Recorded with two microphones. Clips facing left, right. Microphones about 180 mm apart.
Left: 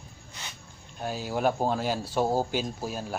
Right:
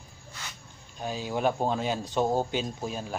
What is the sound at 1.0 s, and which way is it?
A man's voice, 10° left (ahead or behind).